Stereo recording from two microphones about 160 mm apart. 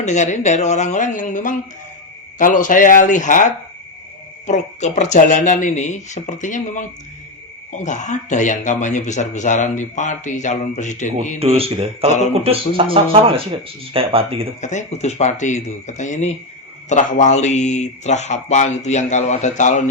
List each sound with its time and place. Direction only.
0.0 s speech: 45° left (ahead or behind)
11.3 s speech: 35° right (ahead or behind)
14.6 s speech: 50° left (ahead or behind)